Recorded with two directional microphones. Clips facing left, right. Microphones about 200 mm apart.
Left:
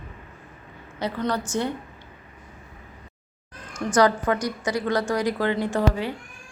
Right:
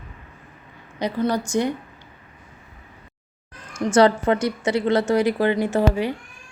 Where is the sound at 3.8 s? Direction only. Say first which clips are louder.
Right 4 dB; 25° right (ahead or behind).